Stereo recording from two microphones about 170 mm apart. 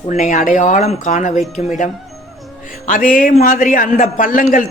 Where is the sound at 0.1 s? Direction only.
45° left (ahead or behind).